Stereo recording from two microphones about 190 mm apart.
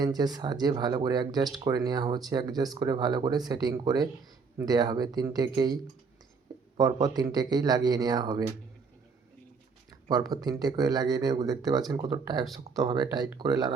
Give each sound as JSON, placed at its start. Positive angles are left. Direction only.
{"t": 0.0, "sound": "speech", "side_deg": -20}
{"t": 10.1, "sound": "speech", "side_deg": -20}